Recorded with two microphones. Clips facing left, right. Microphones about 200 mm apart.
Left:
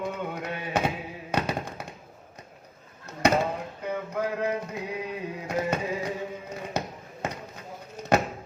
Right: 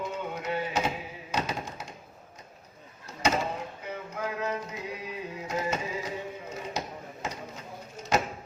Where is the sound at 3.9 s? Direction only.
55° left (ahead or behind).